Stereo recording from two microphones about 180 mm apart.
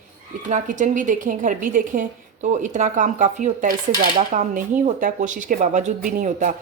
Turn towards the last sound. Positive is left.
turn(degrees=-45)  # may be behind; listen again after turning